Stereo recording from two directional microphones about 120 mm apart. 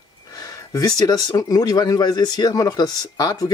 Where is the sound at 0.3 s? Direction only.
35° left (ahead or behind).